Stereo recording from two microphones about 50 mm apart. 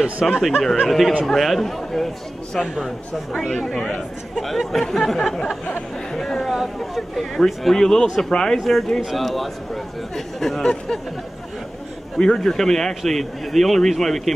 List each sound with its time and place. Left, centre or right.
0.0 s speech: centre
0.8 s speech: centre
3.3 s speech: centre
12.2 s speech: centre